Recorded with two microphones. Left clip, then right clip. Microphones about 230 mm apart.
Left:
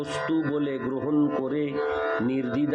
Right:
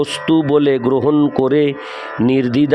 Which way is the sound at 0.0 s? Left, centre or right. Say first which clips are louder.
Right 11 dB; right.